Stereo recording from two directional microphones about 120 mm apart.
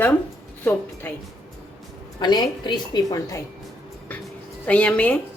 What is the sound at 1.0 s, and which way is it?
Speech, 15° left (ahead or behind).